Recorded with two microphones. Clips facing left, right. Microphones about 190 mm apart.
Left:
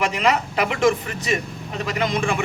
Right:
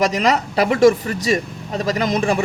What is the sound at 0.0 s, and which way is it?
A man's voice, 40° right (ahead or behind).